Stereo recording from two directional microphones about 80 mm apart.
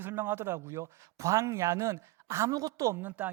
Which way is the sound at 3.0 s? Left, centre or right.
Right.